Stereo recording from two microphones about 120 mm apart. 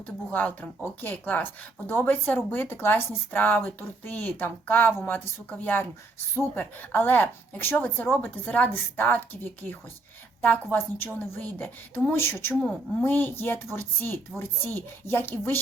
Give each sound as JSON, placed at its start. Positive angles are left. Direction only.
{"t": 0.3, "sound": "a woman's voice", "side_deg": 15}